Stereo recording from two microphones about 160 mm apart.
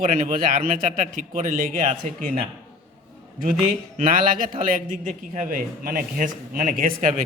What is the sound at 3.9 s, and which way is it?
A man's voice, 55° right (ahead or behind).